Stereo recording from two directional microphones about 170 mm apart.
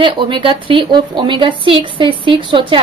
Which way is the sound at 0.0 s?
30° right (ahead or behind).